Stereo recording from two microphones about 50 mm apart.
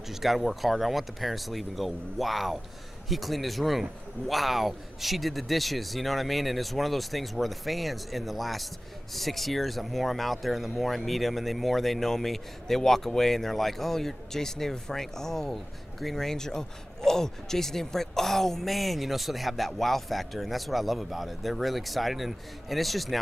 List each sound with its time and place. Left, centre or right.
0.1 s speech: centre